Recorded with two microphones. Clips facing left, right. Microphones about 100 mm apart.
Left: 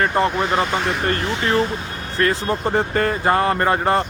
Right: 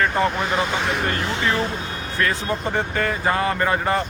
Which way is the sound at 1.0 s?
35° left (ahead or behind).